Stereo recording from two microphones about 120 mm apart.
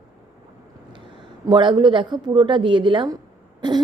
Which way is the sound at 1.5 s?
40° right (ahead or behind).